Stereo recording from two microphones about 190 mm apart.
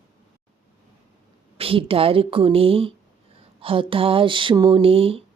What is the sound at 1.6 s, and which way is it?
Speech, 30° right (ahead or behind).